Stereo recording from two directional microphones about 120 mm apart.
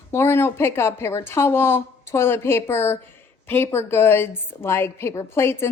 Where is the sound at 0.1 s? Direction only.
20° left (ahead or behind).